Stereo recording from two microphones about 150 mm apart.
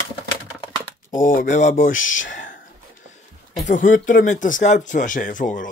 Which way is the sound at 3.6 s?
60° left (ahead or behind).